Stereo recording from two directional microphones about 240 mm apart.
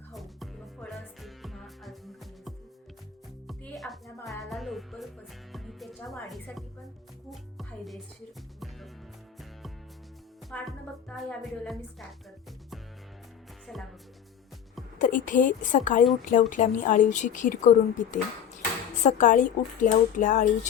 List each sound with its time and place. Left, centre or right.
0.1 s music: centre
3.4 s music: centre
6.2 s speech: centre
7.3 s music: centre
10.5 s speech: centre
13.7 s speech: centre
14.9 s a woman's voice: left